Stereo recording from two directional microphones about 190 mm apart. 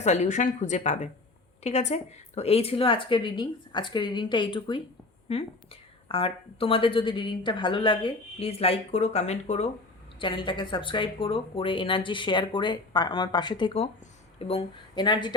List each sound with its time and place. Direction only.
0.0 s speech: 35° left (ahead or behind)
6.1 s speech: 30° left (ahead or behind)
10.2 s speech: 25° left (ahead or behind)